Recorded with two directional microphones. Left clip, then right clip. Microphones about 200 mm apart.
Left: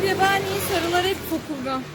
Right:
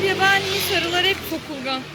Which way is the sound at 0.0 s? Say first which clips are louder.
Right 2 dB; 55° left (ahead or behind).